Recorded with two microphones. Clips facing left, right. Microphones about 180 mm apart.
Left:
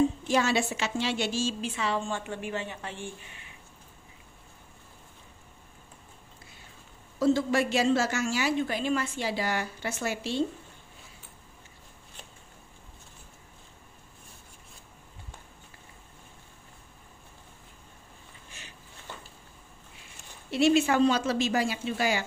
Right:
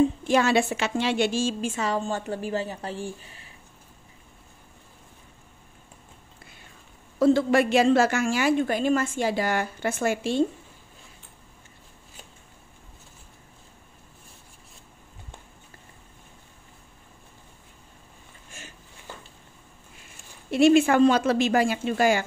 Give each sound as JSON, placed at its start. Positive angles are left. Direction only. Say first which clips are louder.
{"t": 0.3, "sound": "a woman's voice", "louder": "right 5 dB", "side_deg": -55}
{"t": 7.2, "sound": "a woman's voice", "louder": "right 5 dB", "side_deg": -60}
{"t": 20.5, "sound": "a woman's voice", "louder": "right 5 dB", "side_deg": -50}